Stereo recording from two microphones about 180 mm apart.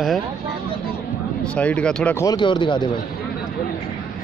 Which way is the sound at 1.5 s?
5° left (ahead or behind).